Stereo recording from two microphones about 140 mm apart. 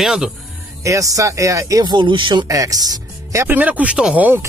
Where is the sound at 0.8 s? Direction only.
25° right (ahead or behind).